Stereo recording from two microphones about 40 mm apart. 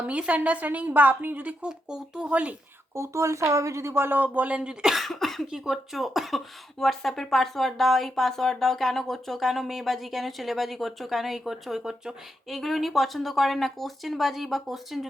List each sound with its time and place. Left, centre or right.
0.0 s a woman's voice: right
1.6 s speech: centre
2.3 s a woman's voice: right
3.9 s speech: right
4.2 s speech: right
4.5 s speech: right
4.9 s cough: centre
5.5 s speech: centre
12.5 s speech: centre